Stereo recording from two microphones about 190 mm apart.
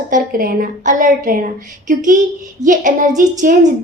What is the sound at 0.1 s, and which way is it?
A woman's voice, 50° right (ahead or behind).